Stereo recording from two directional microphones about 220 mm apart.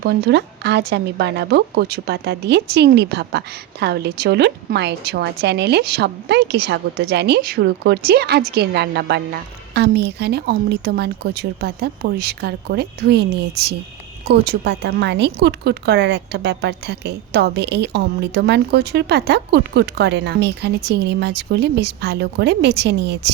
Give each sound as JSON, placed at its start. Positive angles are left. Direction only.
{"t": 0.0, "sound": "speech", "side_deg": -50}